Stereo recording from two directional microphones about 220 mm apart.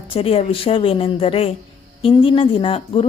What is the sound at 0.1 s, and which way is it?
A woman's voice, 25° left (ahead or behind).